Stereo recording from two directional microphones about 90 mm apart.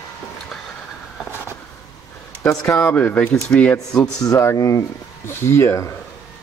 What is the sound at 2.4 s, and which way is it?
Speech, 10° left (ahead or behind).